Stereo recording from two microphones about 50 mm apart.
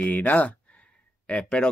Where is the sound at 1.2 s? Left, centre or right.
Left.